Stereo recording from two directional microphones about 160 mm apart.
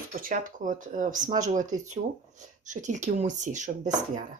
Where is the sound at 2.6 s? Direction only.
50° right (ahead or behind).